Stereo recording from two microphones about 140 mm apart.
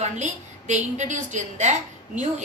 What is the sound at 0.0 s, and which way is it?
A woman's voice, 60° right (ahead or behind).